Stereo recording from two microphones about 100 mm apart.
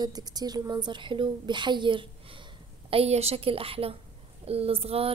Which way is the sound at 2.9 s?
85° right.